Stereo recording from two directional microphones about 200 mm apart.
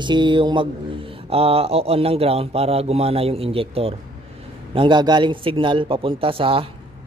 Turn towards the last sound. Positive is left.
turn(degrees=-25)  # may be behind; listen again after turning